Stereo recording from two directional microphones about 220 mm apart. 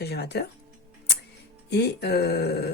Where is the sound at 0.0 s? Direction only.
50° left (ahead or behind).